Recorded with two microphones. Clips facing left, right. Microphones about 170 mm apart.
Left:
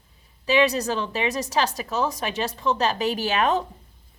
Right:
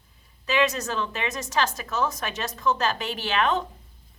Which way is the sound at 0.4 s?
35° left (ahead or behind).